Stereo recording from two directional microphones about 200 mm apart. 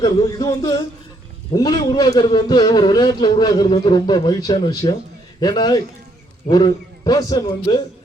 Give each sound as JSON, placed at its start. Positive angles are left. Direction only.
{"t": 0.0, "sound": "a man's voice", "side_deg": 20}